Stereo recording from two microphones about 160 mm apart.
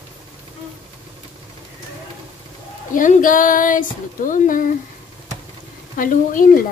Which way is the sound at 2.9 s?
55° left (ahead or behind).